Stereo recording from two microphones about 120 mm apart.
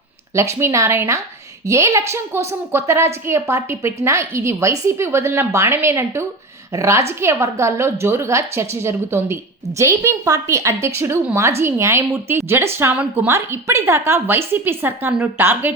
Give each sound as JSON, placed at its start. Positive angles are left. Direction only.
{"t": 0.3, "sound": "a woman's voice", "side_deg": -25}